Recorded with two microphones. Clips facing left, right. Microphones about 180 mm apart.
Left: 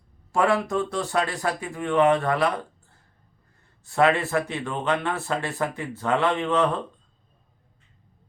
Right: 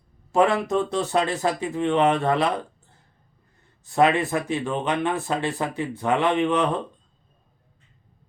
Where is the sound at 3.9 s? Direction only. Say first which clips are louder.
Right 1 dB; 20° right (ahead or behind).